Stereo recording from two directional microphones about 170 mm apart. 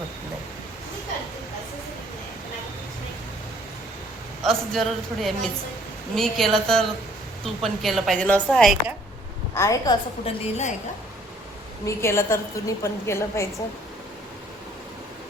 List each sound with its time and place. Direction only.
4.4 s a woman's voice: centre (ahead or behind)
9.6 s a woman's voice: 20° left (ahead or behind)
10.2 s a woman's voice: 45° left (ahead or behind)
11.9 s a woman's voice: 15° left (ahead or behind)